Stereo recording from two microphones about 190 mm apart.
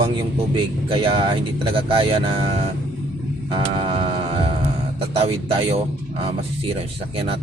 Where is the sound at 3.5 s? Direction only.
30° right (ahead or behind).